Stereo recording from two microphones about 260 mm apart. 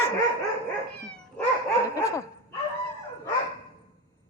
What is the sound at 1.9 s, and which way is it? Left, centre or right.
Speech, centre.